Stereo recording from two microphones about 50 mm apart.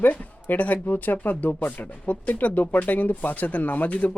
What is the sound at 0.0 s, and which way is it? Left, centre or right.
Speech, left.